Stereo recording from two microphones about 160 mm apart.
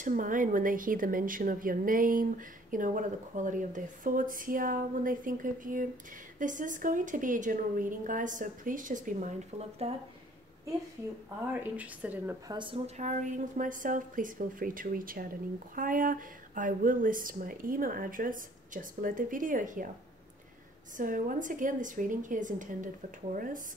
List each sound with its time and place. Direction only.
0.0 s a woman's voice: 55° right (ahead or behind)
11.7 s speech: 10° right (ahead or behind)
12.4 s speech: 30° right (ahead or behind); by 19.9 s 55° right (ahead or behind)
21.0 s speech: 55° right (ahead or behind)